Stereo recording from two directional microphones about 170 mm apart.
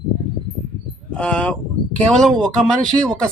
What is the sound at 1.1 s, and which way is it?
Speech, 5° left (ahead or behind).